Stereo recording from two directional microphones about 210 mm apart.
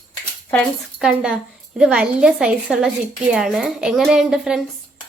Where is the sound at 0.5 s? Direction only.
Centre (ahead or behind).